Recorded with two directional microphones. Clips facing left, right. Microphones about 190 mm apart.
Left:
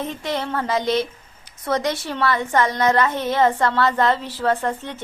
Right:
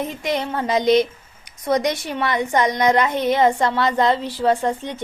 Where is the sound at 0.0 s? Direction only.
15° right (ahead or behind).